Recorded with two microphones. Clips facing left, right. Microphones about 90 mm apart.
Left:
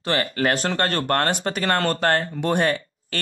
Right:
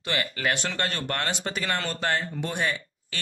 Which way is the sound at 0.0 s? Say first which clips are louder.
Left 6 dB; 40° left (ahead or behind).